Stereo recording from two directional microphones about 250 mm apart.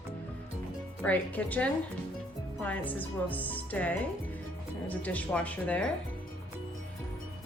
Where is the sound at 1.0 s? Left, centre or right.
Centre.